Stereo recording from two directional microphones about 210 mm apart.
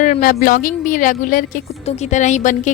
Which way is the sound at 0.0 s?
40° left (ahead or behind).